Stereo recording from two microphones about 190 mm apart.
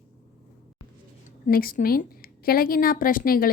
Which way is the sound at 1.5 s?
50° left (ahead or behind).